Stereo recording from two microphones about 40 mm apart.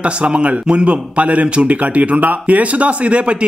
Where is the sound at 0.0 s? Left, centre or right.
Right.